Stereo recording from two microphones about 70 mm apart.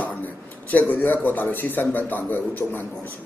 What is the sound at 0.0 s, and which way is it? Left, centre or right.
Speech, left.